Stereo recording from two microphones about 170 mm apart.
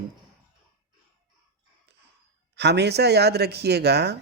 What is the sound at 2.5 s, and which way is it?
Speech, 90° right.